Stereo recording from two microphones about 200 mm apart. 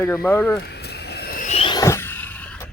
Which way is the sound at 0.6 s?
55° left (ahead or behind).